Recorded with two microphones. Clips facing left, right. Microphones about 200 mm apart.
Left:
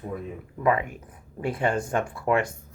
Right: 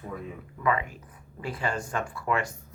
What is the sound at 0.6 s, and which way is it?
Speech, 50° left (ahead or behind).